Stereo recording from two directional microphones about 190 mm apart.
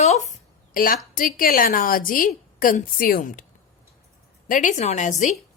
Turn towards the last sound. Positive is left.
turn(degrees=40)  # may be behind; listen again after turning